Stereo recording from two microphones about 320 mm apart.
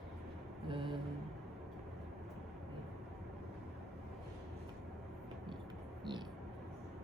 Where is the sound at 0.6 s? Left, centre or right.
Centre.